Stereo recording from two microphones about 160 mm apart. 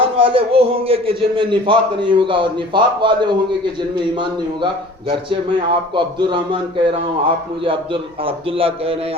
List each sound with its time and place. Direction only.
0.0 s a man's voice: 35° right (ahead or behind)
5.9 s a man's voice: 30° right (ahead or behind)